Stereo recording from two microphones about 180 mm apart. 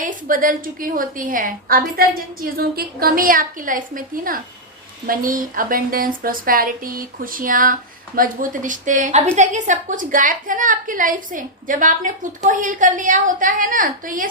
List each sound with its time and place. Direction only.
0.0 s speech: 50° right (ahead or behind)